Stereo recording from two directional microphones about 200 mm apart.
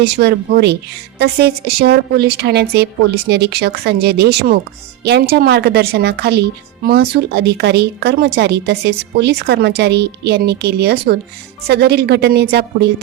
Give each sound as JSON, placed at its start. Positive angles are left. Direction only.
{"t": 0.0, "sound": "speech", "side_deg": -55}